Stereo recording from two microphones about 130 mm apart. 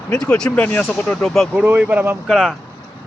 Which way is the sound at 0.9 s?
Centre (ahead or behind).